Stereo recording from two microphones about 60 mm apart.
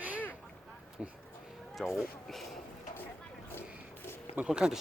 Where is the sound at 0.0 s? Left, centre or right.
Right.